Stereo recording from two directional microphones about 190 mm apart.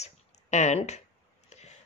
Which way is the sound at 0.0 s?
35° left (ahead or behind).